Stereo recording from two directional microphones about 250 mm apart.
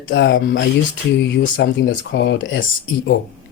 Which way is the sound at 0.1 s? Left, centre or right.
Left.